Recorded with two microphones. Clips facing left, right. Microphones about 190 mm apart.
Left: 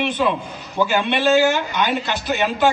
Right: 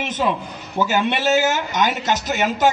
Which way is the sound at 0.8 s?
45° right (ahead or behind).